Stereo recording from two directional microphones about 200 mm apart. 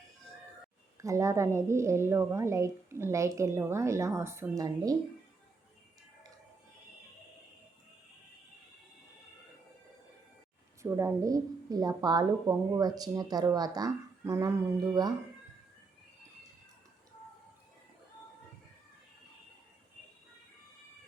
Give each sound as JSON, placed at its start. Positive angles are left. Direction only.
{"t": 0.9, "sound": "a woman's voice", "side_deg": -15}
{"t": 10.8, "sound": "a woman's voice", "side_deg": -15}